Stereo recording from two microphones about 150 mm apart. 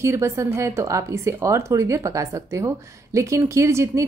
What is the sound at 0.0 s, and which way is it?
Speech, 20° right (ahead or behind).